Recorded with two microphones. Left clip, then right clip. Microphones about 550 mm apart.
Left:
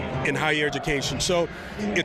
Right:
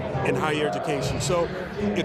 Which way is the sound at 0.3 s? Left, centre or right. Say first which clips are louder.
Left 1 dB; left.